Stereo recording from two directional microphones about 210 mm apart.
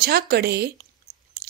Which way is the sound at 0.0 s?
50° right (ahead or behind).